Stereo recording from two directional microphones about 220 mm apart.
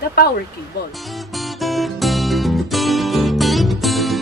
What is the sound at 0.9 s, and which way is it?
Music, centre (ahead or behind).